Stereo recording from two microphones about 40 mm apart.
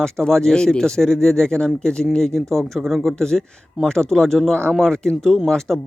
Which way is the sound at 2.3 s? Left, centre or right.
Centre.